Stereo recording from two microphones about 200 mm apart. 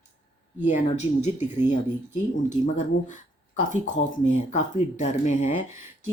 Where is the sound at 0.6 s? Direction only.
35° left (ahead or behind).